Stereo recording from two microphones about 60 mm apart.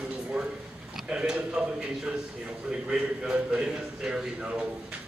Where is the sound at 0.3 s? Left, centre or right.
Right.